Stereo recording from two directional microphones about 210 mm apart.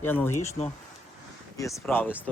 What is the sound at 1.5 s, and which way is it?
Speech, 10° left (ahead or behind).